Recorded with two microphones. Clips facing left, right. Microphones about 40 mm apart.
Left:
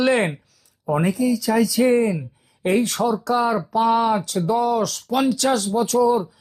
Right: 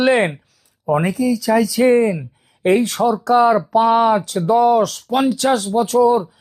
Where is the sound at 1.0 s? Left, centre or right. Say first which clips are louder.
Right 2 dB; right.